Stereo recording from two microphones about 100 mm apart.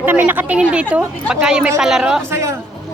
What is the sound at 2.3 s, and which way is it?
Speech, 30° right (ahead or behind).